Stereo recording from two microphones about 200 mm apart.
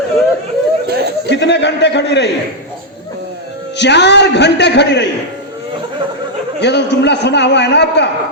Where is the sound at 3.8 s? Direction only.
60° left (ahead or behind).